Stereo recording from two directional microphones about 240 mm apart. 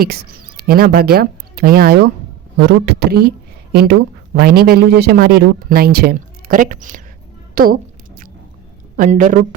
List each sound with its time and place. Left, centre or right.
0.0 s speech: right
9.0 s speech: right